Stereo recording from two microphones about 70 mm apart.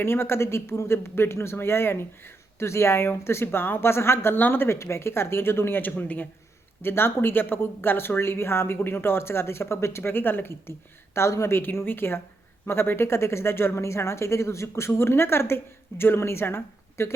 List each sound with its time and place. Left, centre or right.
0.0 s speech: left